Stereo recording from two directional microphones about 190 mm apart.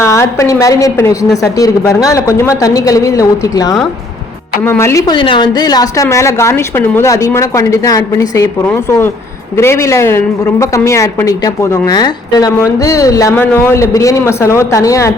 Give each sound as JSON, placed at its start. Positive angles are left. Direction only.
{"t": 0.0, "sound": "a woman's voice", "side_deg": 15}